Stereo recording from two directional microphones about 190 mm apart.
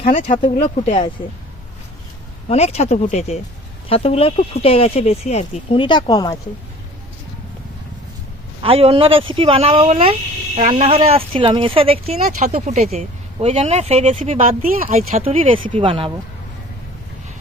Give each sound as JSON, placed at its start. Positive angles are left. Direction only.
{"t": 0.2, "sound": "speech", "side_deg": 40}
{"t": 2.5, "sound": "speech", "side_deg": 35}
{"t": 8.6, "sound": "speech", "side_deg": -30}